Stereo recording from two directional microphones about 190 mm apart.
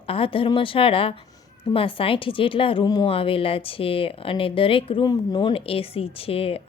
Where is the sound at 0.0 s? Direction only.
30° left (ahead or behind).